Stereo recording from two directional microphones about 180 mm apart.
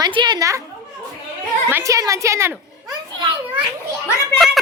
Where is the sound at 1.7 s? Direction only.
15° right (ahead or behind).